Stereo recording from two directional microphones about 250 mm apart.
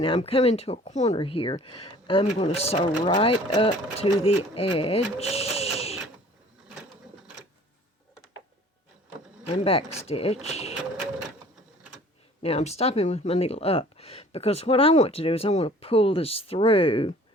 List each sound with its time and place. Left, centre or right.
0.0 s speech: left
9.5 s speech: left
12.4 s speech: left